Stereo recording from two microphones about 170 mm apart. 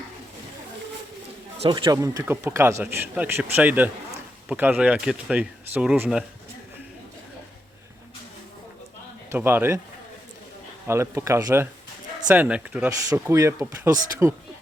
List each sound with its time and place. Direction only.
1.6 s a man's voice: 25° right (ahead or behind); by 6.2 s 5° right (ahead or behind)
9.3 s a man's voice: 15° right (ahead or behind)
10.8 s a man's voice: 15° right (ahead or behind)